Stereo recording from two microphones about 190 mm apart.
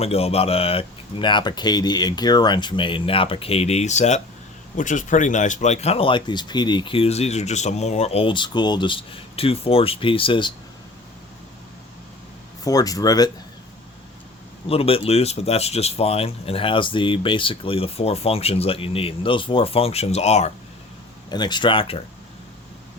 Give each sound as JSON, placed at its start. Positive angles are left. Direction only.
{"t": 0.0, "sound": "speech", "side_deg": 30}
{"t": 12.6, "sound": "speech", "side_deg": 20}
{"t": 14.7, "sound": "speech", "side_deg": 30}
{"t": 21.2, "sound": "speech", "side_deg": 20}